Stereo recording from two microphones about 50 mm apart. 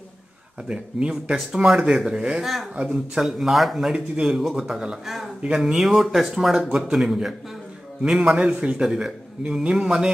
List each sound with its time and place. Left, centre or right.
0.7 s a man's voice: right
1.3 s speech: centre
2.4 s speech: centre
2.7 s a man's voice: right
3.2 s speech: centre
3.9 s speech: centre
4.4 s speech: centre
4.6 s speech: centre
8.4 s a man's voice: right